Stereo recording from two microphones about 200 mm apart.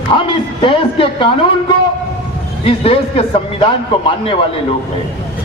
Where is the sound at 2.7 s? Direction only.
30° left (ahead or behind).